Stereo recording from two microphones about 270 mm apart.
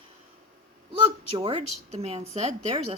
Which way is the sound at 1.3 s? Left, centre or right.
Centre.